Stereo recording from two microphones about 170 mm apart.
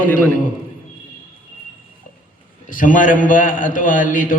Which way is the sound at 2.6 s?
50° left (ahead or behind).